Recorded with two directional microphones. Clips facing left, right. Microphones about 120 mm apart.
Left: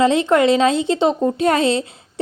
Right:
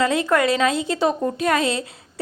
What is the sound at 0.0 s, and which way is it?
A woman's voice, 25° left (ahead or behind).